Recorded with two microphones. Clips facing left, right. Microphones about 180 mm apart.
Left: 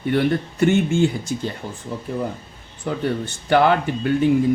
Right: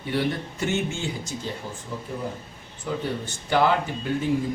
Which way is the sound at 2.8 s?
60° left (ahead or behind).